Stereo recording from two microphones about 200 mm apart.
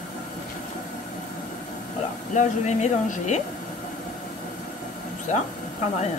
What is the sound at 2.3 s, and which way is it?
A woman's voice, 35° left (ahead or behind).